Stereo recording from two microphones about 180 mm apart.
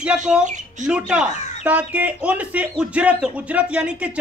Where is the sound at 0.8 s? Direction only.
5° right (ahead or behind).